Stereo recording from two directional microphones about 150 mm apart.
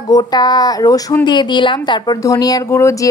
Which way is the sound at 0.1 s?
25° left (ahead or behind).